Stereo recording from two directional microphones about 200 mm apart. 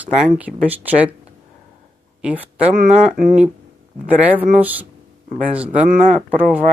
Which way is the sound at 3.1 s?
45° right (ahead or behind).